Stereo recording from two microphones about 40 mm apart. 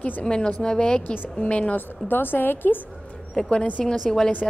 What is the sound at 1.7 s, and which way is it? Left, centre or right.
A woman's voice, left.